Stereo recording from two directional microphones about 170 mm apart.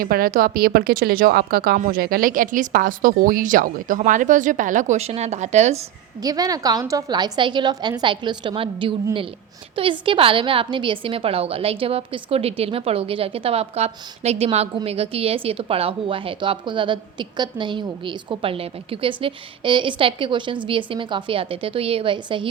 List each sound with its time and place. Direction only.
0.0 s speech: 60° right (ahead or behind); by 5.8 s 40° right (ahead or behind)
6.2 s a woman's voice: 20° right (ahead or behind)